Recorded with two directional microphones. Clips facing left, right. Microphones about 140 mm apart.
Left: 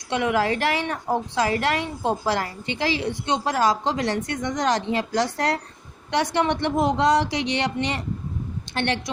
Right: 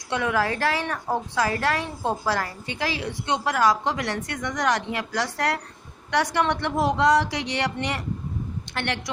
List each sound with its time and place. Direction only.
0.1 s a woman's voice: 20° left (ahead or behind)